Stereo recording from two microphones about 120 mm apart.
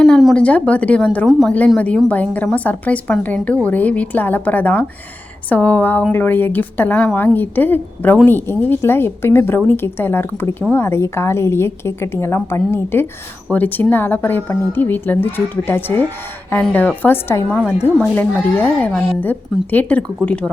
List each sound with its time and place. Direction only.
0.0 s a sound: centre (ahead or behind)
0.3 s a woman's voice: 10° left (ahead or behind)
1.5 s a woman's voice: 10° left (ahead or behind)
17.7 s speech: 15° right (ahead or behind)
18.0 s a woman's voice: 15° left (ahead or behind)